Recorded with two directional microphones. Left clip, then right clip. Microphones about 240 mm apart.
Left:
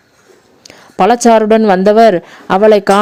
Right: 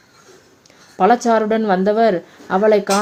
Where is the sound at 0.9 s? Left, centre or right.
Left.